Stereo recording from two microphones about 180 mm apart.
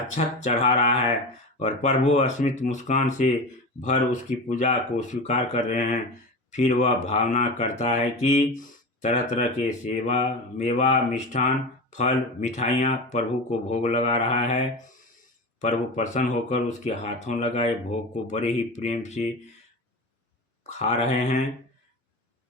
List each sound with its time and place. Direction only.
0.3 s speech: 40° left (ahead or behind)
20.7 s speech: 40° left (ahead or behind)